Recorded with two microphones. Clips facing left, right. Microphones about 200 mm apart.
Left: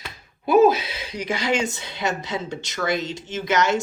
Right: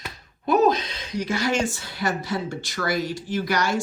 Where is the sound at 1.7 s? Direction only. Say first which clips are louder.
Even; 20° left (ahead or behind).